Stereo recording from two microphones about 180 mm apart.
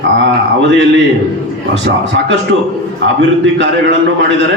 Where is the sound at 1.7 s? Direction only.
85° right.